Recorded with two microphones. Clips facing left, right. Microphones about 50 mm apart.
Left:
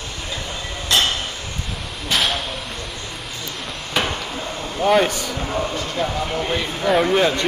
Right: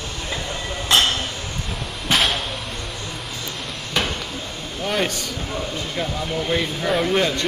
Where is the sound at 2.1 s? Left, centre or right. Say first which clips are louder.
Right 1 dB; centre.